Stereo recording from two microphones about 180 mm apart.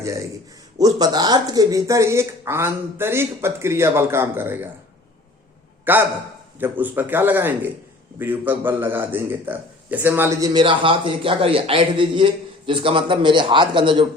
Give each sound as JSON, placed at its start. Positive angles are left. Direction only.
{"t": 0.0, "sound": "a man's voice", "side_deg": -15}
{"t": 5.8, "sound": "a man's voice", "side_deg": -10}